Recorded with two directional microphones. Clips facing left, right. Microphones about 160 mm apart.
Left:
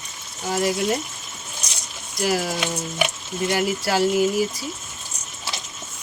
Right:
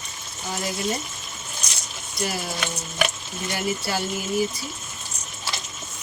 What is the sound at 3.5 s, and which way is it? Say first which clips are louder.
Speech: left 4 dB; 90° left.